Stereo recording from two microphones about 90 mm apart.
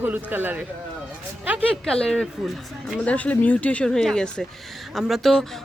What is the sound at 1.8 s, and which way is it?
Speech, 10° left (ahead or behind).